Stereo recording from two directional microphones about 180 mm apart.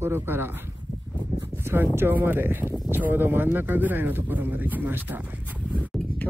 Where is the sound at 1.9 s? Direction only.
10° right (ahead or behind).